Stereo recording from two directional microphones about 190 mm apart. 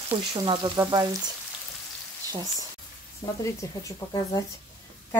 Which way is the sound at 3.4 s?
15° left (ahead or behind).